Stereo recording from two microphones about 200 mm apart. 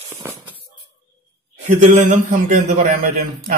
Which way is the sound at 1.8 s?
40° right (ahead or behind).